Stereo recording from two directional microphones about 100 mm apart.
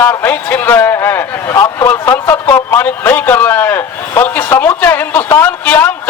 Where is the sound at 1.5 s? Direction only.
30° left (ahead or behind).